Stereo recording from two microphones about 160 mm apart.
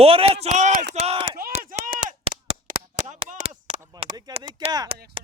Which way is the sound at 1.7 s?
55° right (ahead or behind).